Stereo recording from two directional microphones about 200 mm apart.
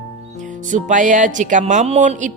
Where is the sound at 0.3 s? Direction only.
40° right (ahead or behind).